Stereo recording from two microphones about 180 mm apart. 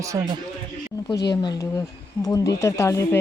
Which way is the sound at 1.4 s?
20° left (ahead or behind).